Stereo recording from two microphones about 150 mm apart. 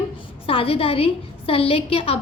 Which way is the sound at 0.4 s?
40° left (ahead or behind).